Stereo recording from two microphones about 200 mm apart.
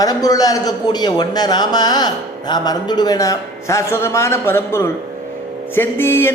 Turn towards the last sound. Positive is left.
turn(degrees=10)  # may be behind; listen again after turning